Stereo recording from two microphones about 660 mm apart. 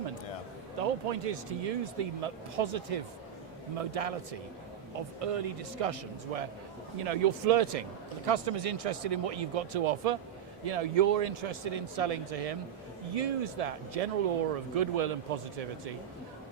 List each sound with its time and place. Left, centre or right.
0.8 s speech: right